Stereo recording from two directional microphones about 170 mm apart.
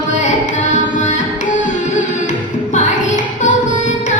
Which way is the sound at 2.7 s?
45° left (ahead or behind).